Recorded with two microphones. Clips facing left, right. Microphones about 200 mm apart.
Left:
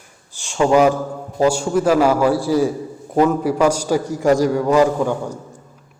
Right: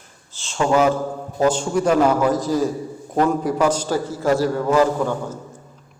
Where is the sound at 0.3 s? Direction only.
15° left (ahead or behind).